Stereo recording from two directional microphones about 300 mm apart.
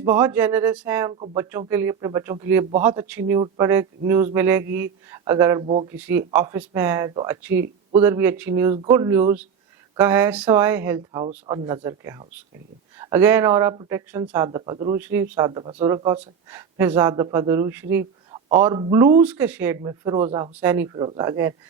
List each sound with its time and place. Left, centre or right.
0.0 s speech: centre
5.6 s speech: right
5.9 s speech: centre